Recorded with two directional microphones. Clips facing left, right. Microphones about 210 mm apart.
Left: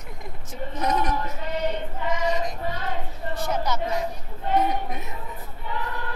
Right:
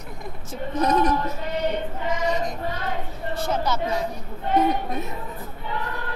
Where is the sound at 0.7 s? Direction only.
20° left (ahead or behind).